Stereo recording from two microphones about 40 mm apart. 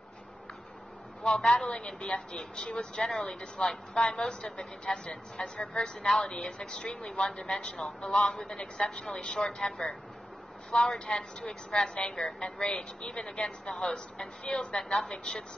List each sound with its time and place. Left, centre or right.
1.2 s a woman's voice: centre
1.7 s speech: left
3.0 s speech: centre
3.3 s a woman's voice: left
7.5 s a woman's voice: left